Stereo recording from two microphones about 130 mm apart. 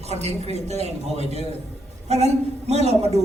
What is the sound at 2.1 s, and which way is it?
A man's voice, 55° right (ahead or behind).